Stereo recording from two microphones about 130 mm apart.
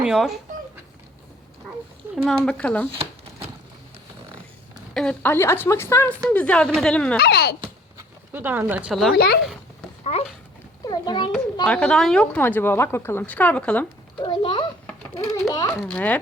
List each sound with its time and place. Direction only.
0.0 s speech: centre (ahead or behind)
2.1 s a woman's voice: 5° left (ahead or behind)
4.9 s a woman's voice: 10° left (ahead or behind)
8.3 s speech: 15° right (ahead or behind)
8.9 s speech: centre (ahead or behind)
10.0 s speech: 55° left (ahead or behind)
10.8 s a child's voice: 30° left (ahead or behind)
11.6 s a woman's voice: 5° left (ahead or behind)
14.2 s a sound: 35° left (ahead or behind)
15.2 s a child's voice: 25° left (ahead or behind)
15.9 s a woman's voice: 10° left (ahead or behind)